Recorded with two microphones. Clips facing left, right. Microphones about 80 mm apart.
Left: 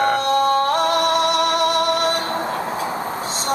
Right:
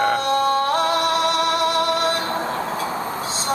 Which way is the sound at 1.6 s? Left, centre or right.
Right.